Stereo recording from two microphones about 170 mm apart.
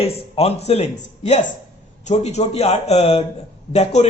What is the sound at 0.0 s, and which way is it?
A man's voice, 35° left (ahead or behind).